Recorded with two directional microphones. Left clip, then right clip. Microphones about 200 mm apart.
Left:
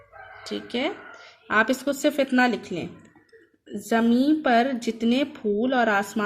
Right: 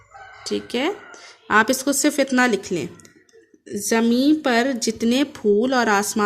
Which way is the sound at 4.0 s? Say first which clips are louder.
Right 3 dB; 45° right (ahead or behind).